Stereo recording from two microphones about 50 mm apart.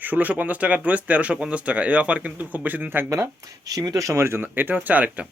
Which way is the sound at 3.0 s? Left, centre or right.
Right.